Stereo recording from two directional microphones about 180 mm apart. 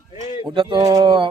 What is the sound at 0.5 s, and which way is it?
Speech, 25° right (ahead or behind).